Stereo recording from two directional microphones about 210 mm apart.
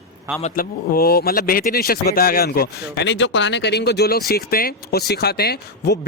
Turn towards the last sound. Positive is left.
turn(degrees=50)  # may be behind; listen again after turning